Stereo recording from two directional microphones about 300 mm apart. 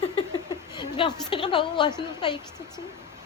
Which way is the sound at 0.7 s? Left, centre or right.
Centre.